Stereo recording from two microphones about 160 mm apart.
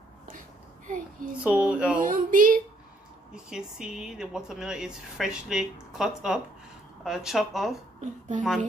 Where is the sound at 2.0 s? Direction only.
60° right (ahead or behind).